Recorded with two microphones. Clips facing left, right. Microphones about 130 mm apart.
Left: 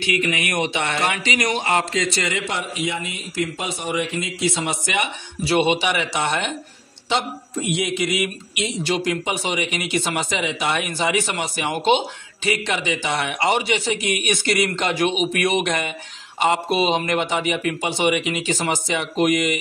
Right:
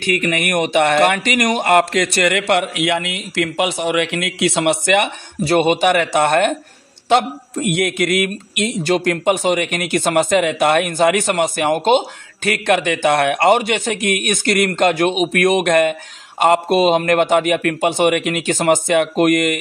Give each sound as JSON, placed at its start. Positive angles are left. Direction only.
{"t": 0.0, "sound": "a man's voice", "side_deg": -55}